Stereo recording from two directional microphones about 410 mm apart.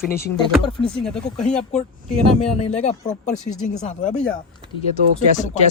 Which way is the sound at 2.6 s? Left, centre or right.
Centre.